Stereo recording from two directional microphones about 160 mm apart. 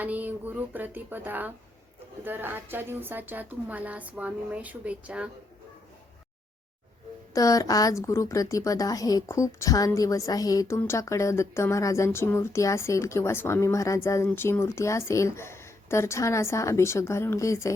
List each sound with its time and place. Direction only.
0.0 s a woman's voice: 10° right (ahead or behind)
7.3 s a woman's voice: 20° left (ahead or behind)